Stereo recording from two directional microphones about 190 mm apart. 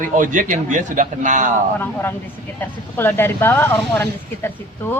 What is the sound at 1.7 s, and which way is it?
Speech, 10° left (ahead or behind).